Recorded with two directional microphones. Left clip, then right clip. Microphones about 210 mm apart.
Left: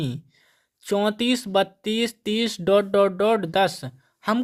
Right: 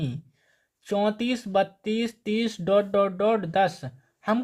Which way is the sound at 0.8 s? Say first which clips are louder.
Left 2 dB; 35° left (ahead or behind).